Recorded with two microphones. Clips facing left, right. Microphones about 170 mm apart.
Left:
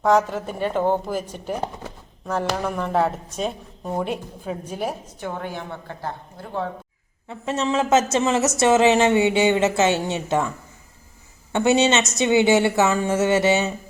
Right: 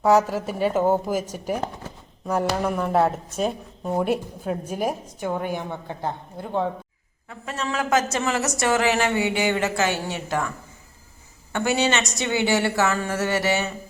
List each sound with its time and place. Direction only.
0.0 s speech: 10° right (ahead or behind)
7.3 s a woman's voice: 25° left (ahead or behind)
11.5 s a woman's voice: 20° left (ahead or behind)